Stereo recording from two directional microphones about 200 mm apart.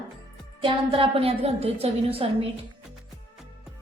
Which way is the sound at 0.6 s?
25° right (ahead or behind).